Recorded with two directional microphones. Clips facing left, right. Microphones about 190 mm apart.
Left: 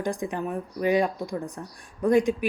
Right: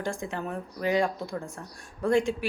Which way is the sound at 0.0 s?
20° left (ahead or behind).